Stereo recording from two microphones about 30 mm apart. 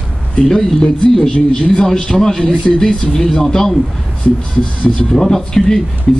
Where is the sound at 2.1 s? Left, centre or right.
Left.